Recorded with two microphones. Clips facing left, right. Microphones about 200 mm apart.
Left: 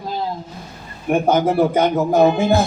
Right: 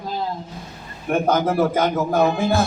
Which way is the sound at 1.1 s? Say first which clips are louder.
Left 3 dB; 15° left (ahead or behind).